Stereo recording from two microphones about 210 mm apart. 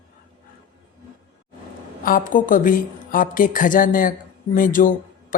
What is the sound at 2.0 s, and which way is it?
Speech, 40° left (ahead or behind).